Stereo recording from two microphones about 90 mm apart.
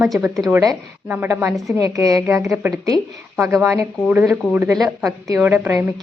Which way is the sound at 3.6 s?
35° right (ahead or behind).